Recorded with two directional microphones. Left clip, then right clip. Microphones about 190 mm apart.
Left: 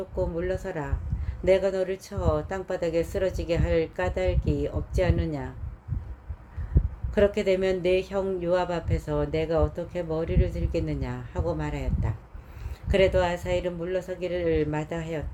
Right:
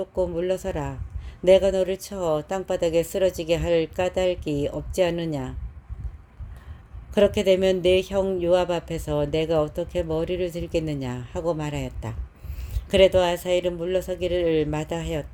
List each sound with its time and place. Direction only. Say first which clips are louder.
0.2 s speech: right 4 dB; 45° right (ahead or behind)
7.1 s speech: right 4 dB; 40° right (ahead or behind)